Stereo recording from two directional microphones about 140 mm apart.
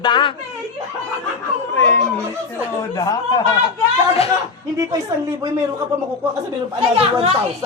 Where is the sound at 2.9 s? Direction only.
30° left (ahead or behind).